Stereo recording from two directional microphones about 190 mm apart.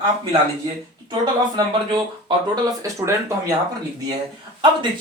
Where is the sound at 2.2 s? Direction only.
20° right (ahead or behind).